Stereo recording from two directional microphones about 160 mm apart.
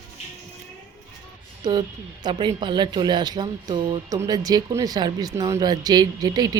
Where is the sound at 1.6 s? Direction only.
25° right (ahead or behind).